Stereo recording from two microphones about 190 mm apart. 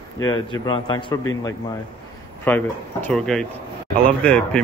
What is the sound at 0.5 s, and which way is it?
A man's voice, 20° left (ahead or behind).